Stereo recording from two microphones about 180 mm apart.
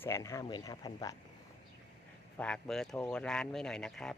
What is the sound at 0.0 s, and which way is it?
Speech, 15° left (ahead or behind).